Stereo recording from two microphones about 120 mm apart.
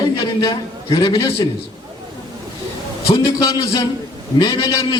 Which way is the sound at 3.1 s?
30° left (ahead or behind).